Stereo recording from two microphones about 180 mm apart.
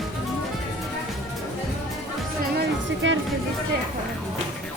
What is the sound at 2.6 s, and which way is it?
Music, 90° right.